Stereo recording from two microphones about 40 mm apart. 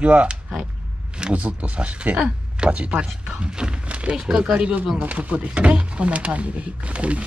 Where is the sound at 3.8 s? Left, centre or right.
Right.